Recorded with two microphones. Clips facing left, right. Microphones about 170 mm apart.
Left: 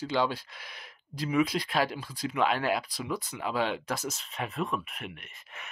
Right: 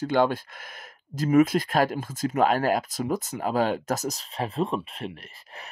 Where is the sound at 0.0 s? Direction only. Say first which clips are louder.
Right 6 dB; 50° right (ahead or behind).